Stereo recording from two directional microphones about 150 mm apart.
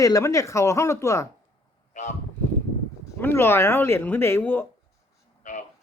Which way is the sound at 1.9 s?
50° left (ahead or behind).